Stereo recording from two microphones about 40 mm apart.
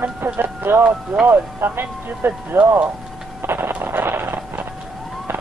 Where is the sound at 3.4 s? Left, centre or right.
Right.